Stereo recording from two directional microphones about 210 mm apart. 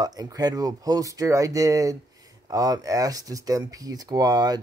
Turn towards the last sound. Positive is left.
turn(degrees=-20)  # may be behind; listen again after turning